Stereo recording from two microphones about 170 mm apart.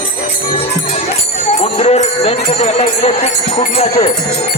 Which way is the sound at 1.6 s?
40° left (ahead or behind).